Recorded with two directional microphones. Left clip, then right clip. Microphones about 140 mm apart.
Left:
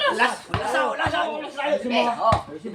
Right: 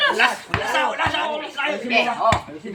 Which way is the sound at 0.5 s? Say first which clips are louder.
Right 2 dB; 20° right (ahead or behind).